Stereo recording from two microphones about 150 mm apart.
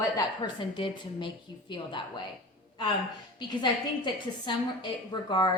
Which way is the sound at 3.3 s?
30° left (ahead or behind).